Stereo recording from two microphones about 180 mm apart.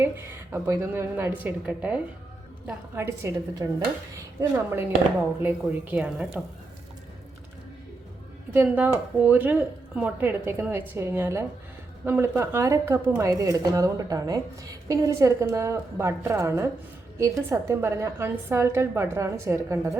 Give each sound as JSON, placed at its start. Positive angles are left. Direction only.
{"t": 0.0, "sound": "a woman's voice", "side_deg": -15}
{"t": 8.5, "sound": "a woman's voice", "side_deg": -10}